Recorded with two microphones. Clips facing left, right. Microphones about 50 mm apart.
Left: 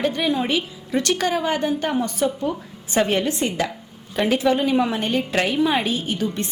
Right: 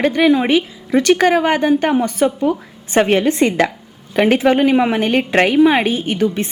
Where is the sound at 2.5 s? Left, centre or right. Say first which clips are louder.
Right 6 dB; right.